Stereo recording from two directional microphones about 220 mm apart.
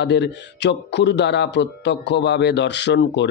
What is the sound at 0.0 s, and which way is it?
Speech, 50° left (ahead or behind).